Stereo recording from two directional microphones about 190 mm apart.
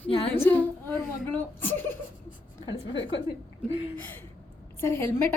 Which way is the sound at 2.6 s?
75° left (ahead or behind).